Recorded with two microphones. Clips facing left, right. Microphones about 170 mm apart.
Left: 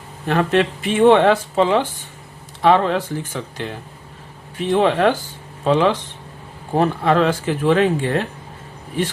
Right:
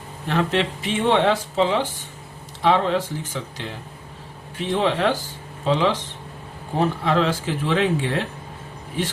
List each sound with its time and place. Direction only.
0.3 s speech: 55° left (ahead or behind)